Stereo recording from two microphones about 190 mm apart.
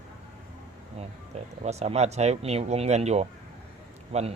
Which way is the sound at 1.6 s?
35° right (ahead or behind).